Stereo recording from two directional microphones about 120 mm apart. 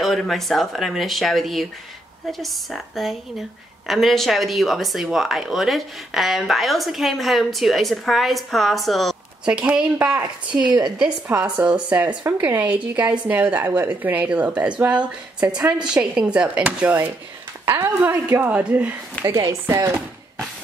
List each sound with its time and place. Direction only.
0.0 s a woman's voice: centre (ahead or behind)
19.2 s speech: 25° right (ahead or behind)